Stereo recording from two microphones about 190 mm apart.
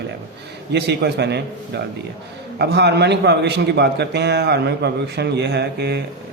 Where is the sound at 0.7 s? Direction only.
60° right (ahead or behind).